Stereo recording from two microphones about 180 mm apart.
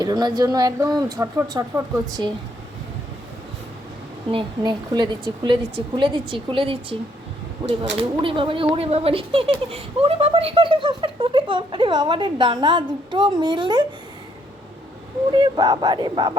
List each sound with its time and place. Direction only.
0.0 s speech: 25° right (ahead or behind)
4.3 s speech: 30° right (ahead or behind)
8.2 s speech: 30° right (ahead or behind)
15.3 s speech: 25° right (ahead or behind)